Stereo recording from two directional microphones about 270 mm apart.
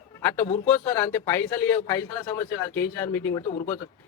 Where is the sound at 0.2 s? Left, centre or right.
Centre.